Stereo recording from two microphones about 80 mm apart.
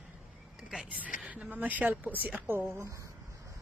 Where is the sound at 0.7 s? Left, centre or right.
Centre.